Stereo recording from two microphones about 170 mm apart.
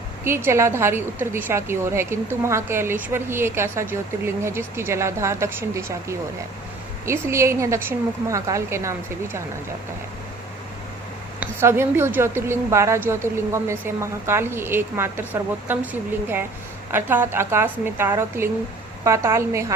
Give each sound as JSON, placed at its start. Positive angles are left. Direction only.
{"t": 0.3, "sound": "a woman's voice", "side_deg": -15}
{"t": 11.3, "sound": "a woman's voice", "side_deg": -15}